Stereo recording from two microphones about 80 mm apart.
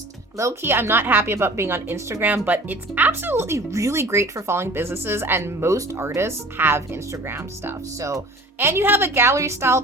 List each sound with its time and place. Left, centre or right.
0.3 s speech: right
2.2 s speech: right
7.9 s speech: right
8.5 s speech: right